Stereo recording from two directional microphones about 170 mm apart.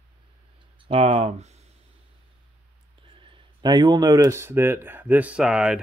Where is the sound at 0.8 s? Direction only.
35° right (ahead or behind).